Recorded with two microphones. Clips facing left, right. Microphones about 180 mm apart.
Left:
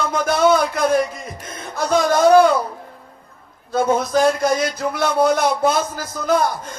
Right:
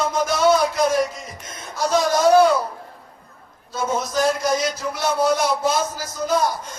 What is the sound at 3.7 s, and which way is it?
A man's voice, 55° left (ahead or behind).